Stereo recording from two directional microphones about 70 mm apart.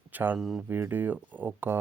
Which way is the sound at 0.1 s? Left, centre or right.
Right.